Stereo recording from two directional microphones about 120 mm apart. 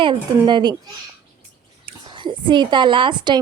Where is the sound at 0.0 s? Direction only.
40° right (ahead or behind).